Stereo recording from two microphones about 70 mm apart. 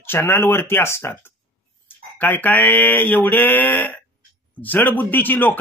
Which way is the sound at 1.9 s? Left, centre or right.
Left.